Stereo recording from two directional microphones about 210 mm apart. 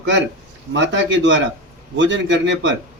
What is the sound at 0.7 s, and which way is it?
A man's voice, 60° right (ahead or behind).